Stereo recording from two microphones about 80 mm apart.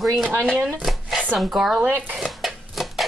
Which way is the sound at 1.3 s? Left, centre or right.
Centre.